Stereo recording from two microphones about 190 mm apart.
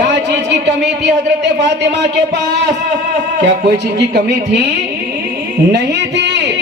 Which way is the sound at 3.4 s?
65° right (ahead or behind).